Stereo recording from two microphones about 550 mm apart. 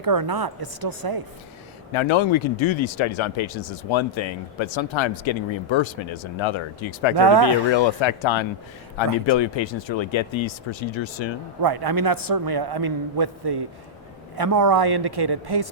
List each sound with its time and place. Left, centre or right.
0.0 s a man's voice: right
1.9 s speech: left
7.2 s a woman's voice: right
7.9 s speech: left
11.6 s a man's voice: right